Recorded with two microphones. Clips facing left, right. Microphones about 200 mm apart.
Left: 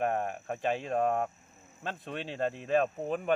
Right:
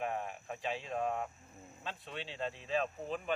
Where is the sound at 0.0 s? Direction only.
55° left (ahead or behind).